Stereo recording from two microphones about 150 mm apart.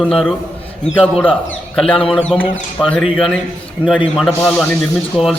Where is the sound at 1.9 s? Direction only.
35° left (ahead or behind).